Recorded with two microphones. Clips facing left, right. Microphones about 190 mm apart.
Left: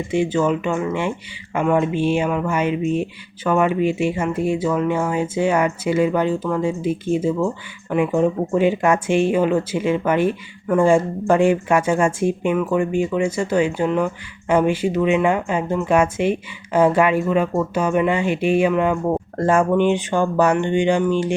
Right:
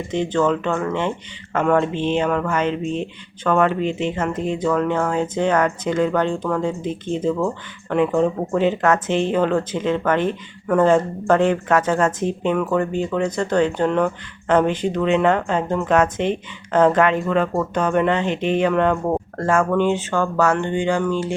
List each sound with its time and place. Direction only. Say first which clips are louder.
0.1 s speech: even; 10° left (ahead or behind)